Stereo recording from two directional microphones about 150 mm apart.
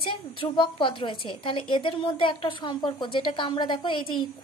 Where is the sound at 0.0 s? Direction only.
35° left (ahead or behind).